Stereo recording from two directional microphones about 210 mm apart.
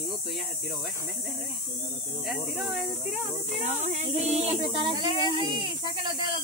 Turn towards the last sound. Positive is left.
turn(degrees=-20)  # may be behind; listen again after turning